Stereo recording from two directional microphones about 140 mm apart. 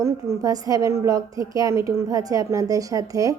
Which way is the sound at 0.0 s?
20° right (ahead or behind).